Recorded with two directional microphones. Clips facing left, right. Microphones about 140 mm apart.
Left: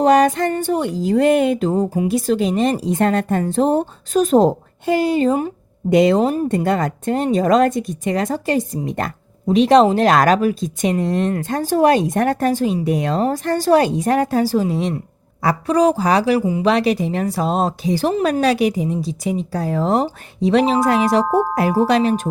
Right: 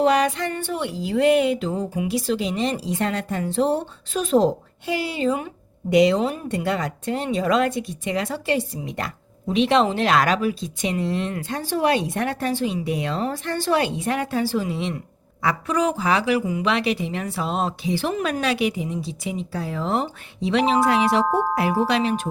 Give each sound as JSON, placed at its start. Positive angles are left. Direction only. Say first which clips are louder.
{"t": 0.0, "sound": "speech", "louder": "left 6 dB", "side_deg": 45}
{"t": 21.2, "sound": "speech", "louder": "left 4 dB", "side_deg": 5}
{"t": 21.5, "sound": "speech", "louder": "left 5 dB", "side_deg": 40}